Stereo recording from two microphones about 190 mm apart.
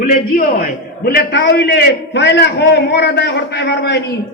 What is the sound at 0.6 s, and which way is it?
A man's voice, 55° left (ahead or behind).